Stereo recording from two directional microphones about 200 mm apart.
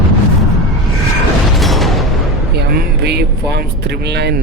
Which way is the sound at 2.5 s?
55° right (ahead or behind).